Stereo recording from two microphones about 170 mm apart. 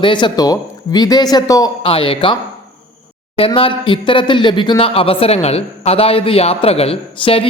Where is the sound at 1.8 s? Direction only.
30° left (ahead or behind).